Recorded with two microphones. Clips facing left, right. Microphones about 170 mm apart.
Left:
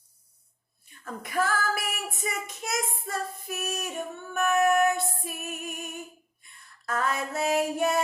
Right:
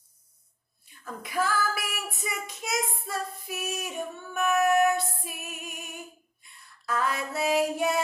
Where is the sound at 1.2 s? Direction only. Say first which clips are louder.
Even; 50° left (ahead or behind).